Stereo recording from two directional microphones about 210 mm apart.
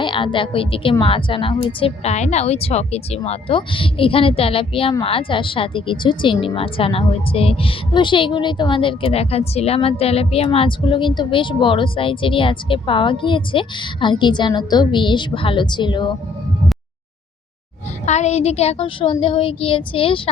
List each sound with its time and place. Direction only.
0.0 s a woman's voice: 25° left (ahead or behind)
18.0 s a woman's voice: 35° left (ahead or behind)